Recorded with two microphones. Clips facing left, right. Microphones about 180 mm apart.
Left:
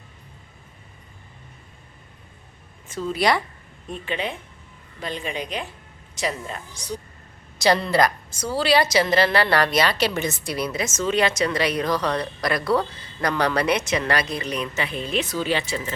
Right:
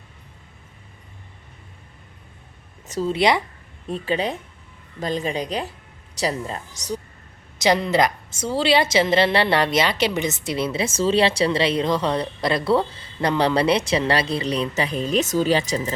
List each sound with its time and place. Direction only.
2.8 s a woman's voice: 40° right (ahead or behind)
3.1 s a woman's voice: 20° right (ahead or behind)
3.8 s a woman's voice: 35° right (ahead or behind)
7.6 s a woman's voice: 20° right (ahead or behind); by 16.0 s 40° right (ahead or behind)